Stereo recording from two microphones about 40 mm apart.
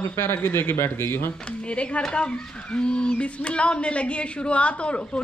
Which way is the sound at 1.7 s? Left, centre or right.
Left.